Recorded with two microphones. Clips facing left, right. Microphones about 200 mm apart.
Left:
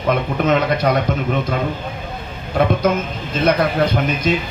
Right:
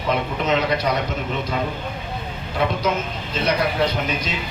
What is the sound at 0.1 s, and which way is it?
Speech, 50° left (ahead or behind).